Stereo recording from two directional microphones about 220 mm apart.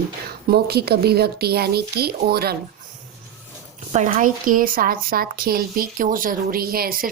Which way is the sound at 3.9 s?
35° right (ahead or behind).